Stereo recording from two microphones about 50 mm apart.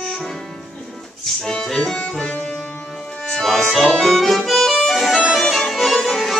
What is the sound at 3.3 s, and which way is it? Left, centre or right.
Accordion, centre.